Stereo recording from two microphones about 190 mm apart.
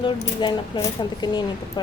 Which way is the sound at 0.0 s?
25° left (ahead or behind).